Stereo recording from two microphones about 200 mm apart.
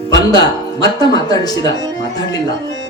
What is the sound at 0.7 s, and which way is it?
Speech, 20° left (ahead or behind).